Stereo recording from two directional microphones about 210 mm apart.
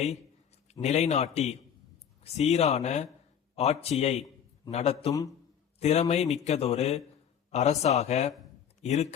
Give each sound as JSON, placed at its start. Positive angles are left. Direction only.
{"t": 0.7, "sound": "speech", "side_deg": 30}